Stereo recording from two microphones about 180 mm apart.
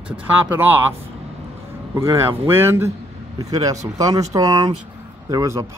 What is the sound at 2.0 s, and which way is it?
Speech, 15° right (ahead or behind).